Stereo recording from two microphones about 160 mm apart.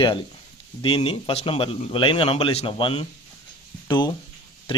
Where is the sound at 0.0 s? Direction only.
30° left (ahead or behind).